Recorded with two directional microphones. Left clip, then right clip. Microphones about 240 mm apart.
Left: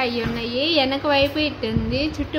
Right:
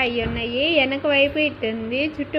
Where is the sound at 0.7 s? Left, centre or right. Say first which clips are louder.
Even; left.